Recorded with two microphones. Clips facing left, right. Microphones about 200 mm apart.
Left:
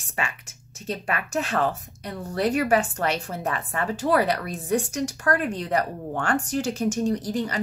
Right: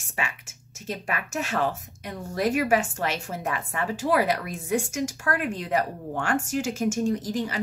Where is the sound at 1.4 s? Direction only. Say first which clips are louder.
Left 2 dB; 10° right (ahead or behind).